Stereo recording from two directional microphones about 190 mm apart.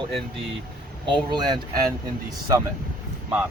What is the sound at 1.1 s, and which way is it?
Speech, 20° right (ahead or behind).